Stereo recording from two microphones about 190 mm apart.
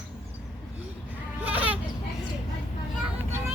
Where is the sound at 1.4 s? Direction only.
10° right (ahead or behind).